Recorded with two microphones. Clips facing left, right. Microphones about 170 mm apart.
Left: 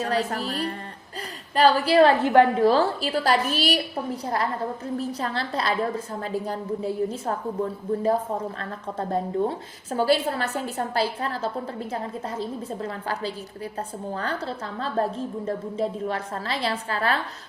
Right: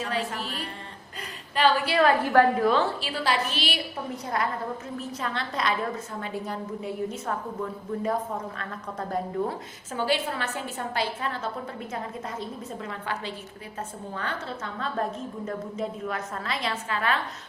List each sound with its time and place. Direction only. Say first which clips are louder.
0.0 s a woman's voice: left 5 dB; 40° left (ahead or behind)
2.2 s a woman's voice: left 3 dB; 20° left (ahead or behind)
2.6 s a woman's voice: left 4 dB; 40° left (ahead or behind)
9.9 s a woman's voice: left 5 dB; 40° left (ahead or behind)